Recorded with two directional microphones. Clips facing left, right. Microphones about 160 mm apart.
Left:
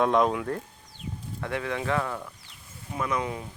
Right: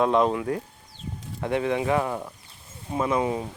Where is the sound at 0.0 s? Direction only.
Centre (ahead or behind).